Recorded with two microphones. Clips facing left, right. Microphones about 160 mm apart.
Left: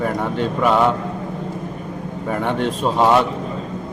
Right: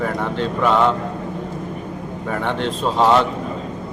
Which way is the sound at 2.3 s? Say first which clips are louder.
Left 2 dB; 10° left (ahead or behind).